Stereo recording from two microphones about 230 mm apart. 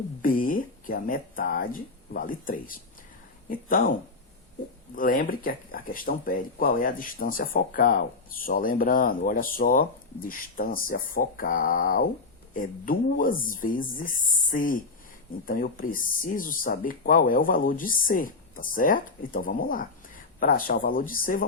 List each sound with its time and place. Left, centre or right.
0.2 s speech: left
4.9 s speech: left